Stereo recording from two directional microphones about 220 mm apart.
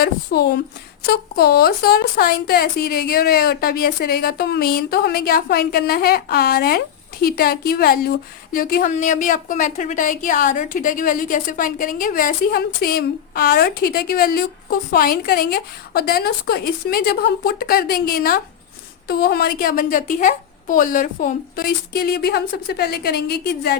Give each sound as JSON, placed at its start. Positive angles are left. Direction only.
{"t": 0.0, "sound": "a woman's voice", "side_deg": 45}